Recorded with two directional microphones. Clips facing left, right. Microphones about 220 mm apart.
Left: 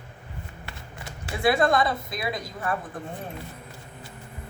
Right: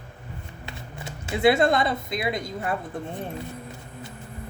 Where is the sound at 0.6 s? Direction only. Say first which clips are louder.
Right 3 dB; 20° right (ahead or behind).